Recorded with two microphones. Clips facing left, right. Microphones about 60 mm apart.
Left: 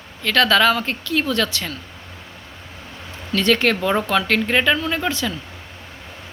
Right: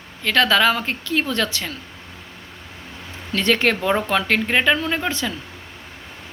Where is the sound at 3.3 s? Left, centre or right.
Right.